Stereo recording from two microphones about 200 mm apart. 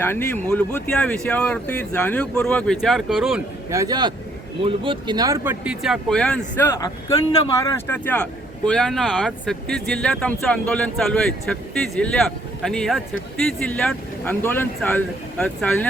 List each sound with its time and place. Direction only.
0.5 s speech: 5° left (ahead or behind)
3.7 s speech: 15° right (ahead or behind); by 15.9 s 5° left (ahead or behind)